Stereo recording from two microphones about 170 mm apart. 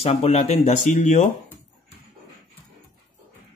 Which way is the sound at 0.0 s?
35° left (ahead or behind).